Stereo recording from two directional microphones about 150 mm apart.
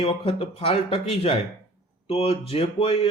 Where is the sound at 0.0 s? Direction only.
35° left (ahead or behind).